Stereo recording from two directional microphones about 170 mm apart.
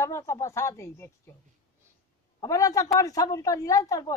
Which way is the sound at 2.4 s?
20° left (ahead or behind).